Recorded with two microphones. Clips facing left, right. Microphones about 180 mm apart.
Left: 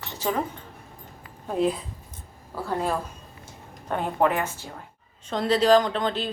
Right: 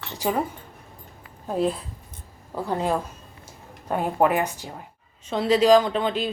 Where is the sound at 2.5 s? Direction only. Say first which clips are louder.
Right 2 dB; 20° right (ahead or behind).